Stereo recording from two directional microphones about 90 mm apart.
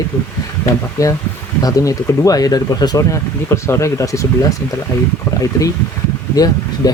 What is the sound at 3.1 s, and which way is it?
Speech, 30° left (ahead or behind).